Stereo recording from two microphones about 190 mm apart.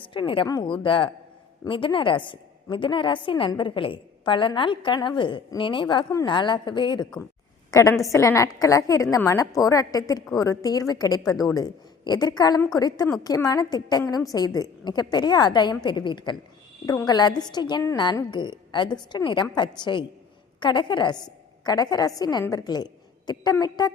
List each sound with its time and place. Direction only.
0.0 s a woman's voice: 25° left (ahead or behind)